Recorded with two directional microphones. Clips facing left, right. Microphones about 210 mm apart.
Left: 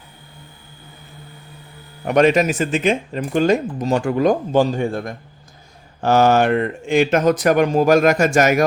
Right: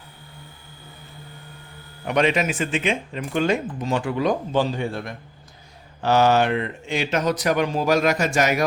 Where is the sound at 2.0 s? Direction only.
45° left (ahead or behind).